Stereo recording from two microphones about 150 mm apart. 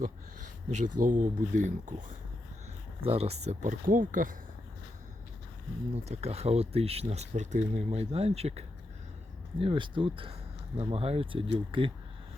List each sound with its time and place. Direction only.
0.7 s speech: 55° right (ahead or behind)
3.0 s speech: 40° right (ahead or behind); by 4.4 s 60° right (ahead or behind)
5.9 s speech: 45° right (ahead or behind)
9.6 s speech: 35° right (ahead or behind)